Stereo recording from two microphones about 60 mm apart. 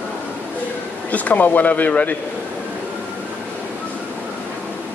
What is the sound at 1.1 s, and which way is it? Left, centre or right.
Speech, left.